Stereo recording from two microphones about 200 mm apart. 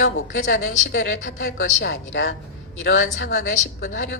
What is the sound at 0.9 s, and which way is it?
A woman's voice, 55° left (ahead or behind).